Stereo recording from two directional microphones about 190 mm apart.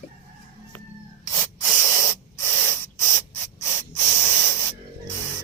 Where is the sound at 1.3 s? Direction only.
15° left (ahead or behind).